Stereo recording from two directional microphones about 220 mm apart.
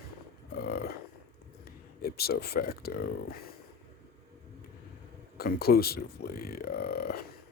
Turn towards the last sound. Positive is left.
turn(degrees=45)  # may be behind; listen again after turning